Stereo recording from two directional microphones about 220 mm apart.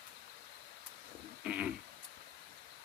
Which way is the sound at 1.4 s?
5° right (ahead or behind).